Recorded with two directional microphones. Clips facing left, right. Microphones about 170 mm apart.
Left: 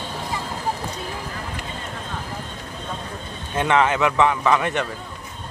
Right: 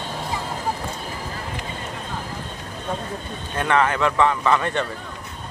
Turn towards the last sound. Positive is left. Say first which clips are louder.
# left 1 dB
turn(degrees=15)  # may be behind; listen again after turning